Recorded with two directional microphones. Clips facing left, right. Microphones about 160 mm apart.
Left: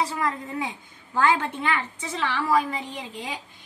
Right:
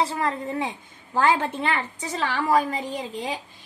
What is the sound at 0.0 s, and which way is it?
A woman's voice, 30° right (ahead or behind).